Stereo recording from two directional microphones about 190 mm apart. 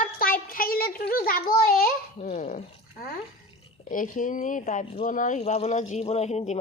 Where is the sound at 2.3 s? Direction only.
35° left (ahead or behind).